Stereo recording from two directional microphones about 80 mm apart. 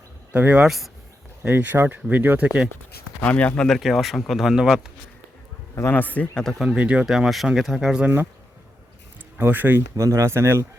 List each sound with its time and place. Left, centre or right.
0.3 s speech: centre
3.2 s speech: centre
3.7 s speech: centre
5.9 s a man's voice: left
6.4 s speech: centre
6.7 s speech: centre
7.0 s speech: centre
8.0 s speech: right
9.4 s speech: right
9.9 s speech: right